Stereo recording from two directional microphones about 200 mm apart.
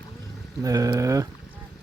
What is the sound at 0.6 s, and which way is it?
Speech, 15° right (ahead or behind).